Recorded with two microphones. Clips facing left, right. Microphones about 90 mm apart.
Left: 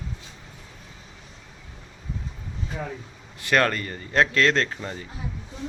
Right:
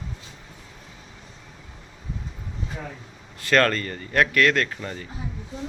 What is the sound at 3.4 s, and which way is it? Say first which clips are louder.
Speech: right 2 dB; 15° left (ahead or behind).